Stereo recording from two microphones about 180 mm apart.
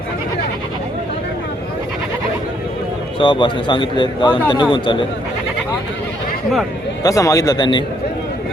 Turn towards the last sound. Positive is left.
turn(degrees=25)  # may be behind; listen again after turning